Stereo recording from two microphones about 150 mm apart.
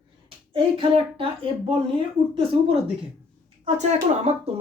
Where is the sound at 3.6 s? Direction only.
50° right (ahead or behind).